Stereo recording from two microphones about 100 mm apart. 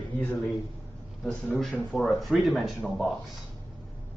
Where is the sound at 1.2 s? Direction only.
Centre (ahead or behind).